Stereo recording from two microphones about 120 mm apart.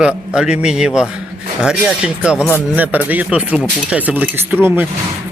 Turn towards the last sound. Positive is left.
turn(degrees=-15)  # may be behind; listen again after turning